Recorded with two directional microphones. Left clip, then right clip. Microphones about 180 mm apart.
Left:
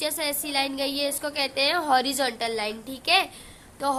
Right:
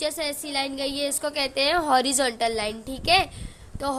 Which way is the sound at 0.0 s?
25° right (ahead or behind).